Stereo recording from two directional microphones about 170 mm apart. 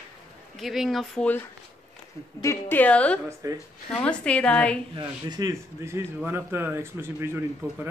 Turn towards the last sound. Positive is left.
turn(degrees=-15)  # may be behind; listen again after turning